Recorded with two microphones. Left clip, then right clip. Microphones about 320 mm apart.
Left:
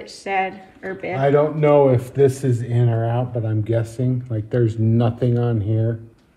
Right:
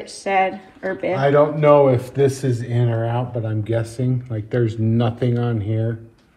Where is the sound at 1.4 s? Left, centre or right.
Right.